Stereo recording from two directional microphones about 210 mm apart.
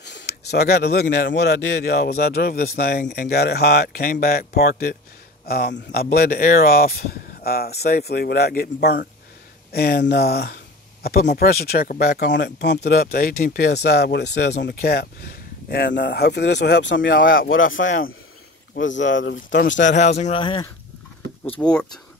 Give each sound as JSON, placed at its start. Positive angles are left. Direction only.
{"t": 0.0, "sound": "speech", "side_deg": 55}
{"t": 17.3, "sound": "speech", "side_deg": 65}
{"t": 20.0, "sound": "speech", "side_deg": 30}
{"t": 21.5, "sound": "speech", "side_deg": 5}